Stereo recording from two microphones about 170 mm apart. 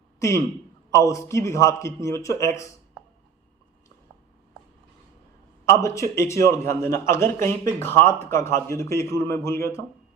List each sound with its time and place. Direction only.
0.2 s a man's voice: 15° left (ahead or behind)
5.6 s a man's voice: 15° left (ahead or behind)